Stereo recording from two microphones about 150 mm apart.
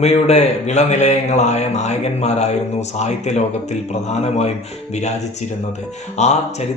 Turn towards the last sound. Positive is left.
turn(degrees=50)  # may be behind; listen again after turning